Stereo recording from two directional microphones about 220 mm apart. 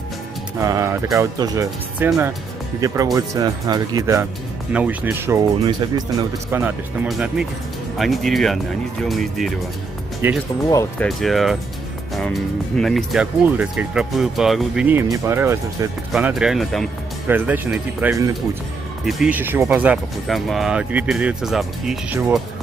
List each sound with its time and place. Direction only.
0.6 s speech: 15° right (ahead or behind)
3.2 s speech: 15° right (ahead or behind)
6.5 s speech: 5° right (ahead or behind)
10.7 s speech: 15° left (ahead or behind)
11.1 s speech: centre (ahead or behind)